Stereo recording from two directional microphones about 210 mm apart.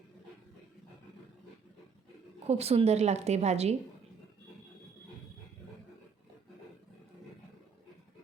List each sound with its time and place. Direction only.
2.5 s a woman's voice: 30° right (ahead or behind)